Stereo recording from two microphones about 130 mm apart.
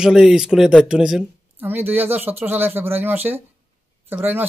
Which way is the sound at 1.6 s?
15° right (ahead or behind).